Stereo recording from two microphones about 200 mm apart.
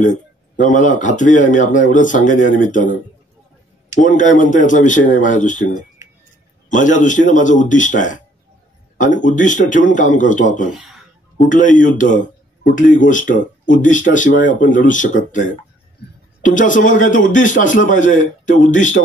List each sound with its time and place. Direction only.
0.0 s a man's voice: 40° left (ahead or behind)
4.0 s a man's voice: 40° left (ahead or behind)
6.8 s a man's voice: 40° left (ahead or behind)